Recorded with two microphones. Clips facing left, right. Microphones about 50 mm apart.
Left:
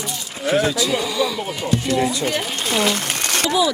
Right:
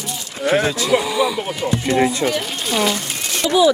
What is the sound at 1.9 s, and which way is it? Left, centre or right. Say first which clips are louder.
Speech: right 4 dB; right.